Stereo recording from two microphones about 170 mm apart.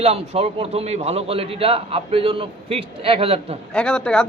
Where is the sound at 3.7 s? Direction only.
5° left (ahead or behind).